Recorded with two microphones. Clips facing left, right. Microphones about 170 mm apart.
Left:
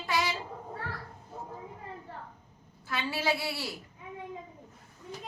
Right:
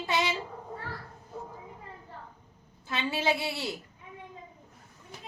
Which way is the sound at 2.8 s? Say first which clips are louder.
Right 2 dB; 20° right (ahead or behind).